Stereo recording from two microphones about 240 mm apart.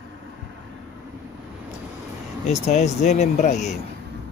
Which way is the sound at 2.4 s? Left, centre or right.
Left.